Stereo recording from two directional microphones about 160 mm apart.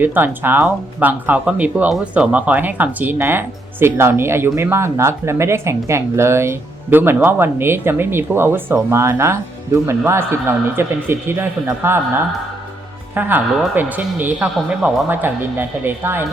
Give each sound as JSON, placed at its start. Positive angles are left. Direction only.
{"t": 0.0, "sound": "speech", "side_deg": -10}
{"t": 13.1, "sound": "speech", "side_deg": -10}